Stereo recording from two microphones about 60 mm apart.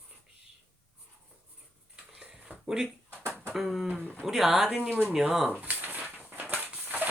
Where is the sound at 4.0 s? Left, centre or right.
Left.